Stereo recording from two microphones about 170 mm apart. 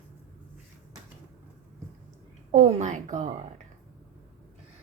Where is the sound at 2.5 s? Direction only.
45° right (ahead or behind).